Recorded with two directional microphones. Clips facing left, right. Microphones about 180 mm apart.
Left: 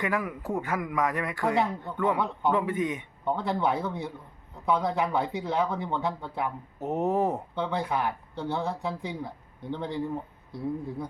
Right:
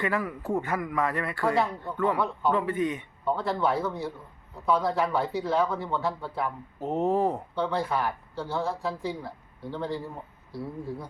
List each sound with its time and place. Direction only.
0.0 s a man's voice: 15° left (ahead or behind)